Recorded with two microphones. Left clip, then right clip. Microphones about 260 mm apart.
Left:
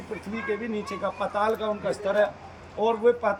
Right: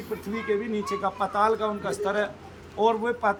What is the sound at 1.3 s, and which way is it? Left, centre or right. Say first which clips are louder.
A man's voice: right 2 dB; centre.